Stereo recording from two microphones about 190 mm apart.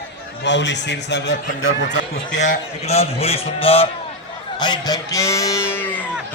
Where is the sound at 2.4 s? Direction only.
35° left (ahead or behind); by 5.6 s 15° left (ahead or behind).